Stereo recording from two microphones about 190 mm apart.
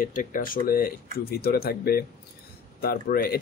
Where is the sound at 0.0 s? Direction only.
45° left (ahead or behind).